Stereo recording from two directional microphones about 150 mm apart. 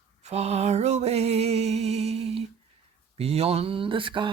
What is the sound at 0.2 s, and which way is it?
Music, 45° right (ahead or behind).